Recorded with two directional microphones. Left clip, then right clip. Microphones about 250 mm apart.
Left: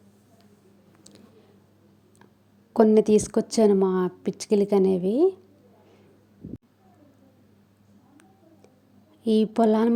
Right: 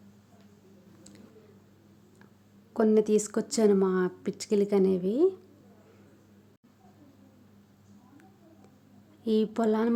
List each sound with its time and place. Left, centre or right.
2.7 s a woman's voice: centre
9.2 s a woman's voice: centre